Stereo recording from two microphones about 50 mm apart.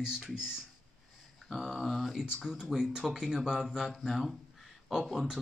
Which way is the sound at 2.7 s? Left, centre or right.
Centre.